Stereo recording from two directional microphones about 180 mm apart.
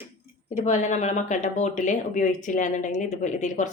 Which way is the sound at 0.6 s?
40° left (ahead or behind).